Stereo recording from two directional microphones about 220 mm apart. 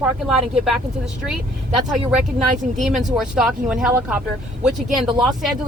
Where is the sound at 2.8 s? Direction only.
Centre (ahead or behind).